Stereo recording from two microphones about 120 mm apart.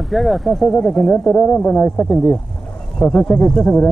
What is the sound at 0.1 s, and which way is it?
Speech, centre (ahead or behind).